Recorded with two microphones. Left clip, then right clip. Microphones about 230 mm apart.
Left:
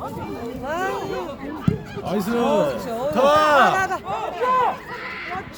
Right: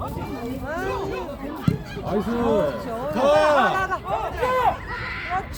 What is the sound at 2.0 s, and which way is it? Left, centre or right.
Speech, left.